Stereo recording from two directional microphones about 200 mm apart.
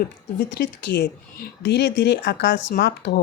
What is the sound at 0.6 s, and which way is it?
A woman's voice, 50° left (ahead or behind).